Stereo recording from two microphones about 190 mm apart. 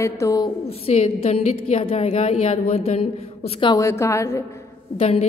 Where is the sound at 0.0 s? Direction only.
15° left (ahead or behind).